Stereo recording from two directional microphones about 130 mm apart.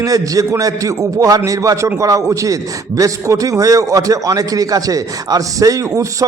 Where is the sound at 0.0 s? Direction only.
25° right (ahead or behind).